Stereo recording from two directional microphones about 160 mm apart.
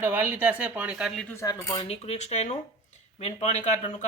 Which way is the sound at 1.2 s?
20° left (ahead or behind).